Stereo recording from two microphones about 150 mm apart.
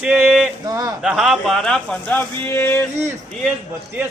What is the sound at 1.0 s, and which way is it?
Speech, centre (ahead or behind).